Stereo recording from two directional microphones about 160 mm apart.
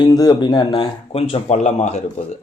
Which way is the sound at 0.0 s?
25° left (ahead or behind).